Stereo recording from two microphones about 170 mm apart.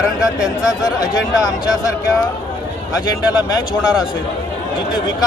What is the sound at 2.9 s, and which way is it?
Speech, 20° left (ahead or behind).